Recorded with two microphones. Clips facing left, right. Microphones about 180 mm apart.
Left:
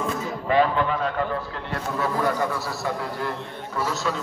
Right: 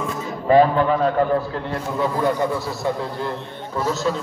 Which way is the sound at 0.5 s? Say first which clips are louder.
Right 6 dB; 40° right (ahead or behind).